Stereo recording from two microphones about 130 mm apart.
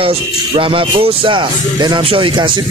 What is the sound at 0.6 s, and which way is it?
Speech, 45° right (ahead or behind).